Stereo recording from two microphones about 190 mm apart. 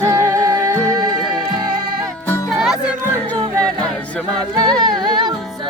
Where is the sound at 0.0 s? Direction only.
15° right (ahead or behind).